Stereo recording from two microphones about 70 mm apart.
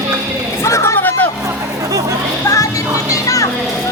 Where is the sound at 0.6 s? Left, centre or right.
Left.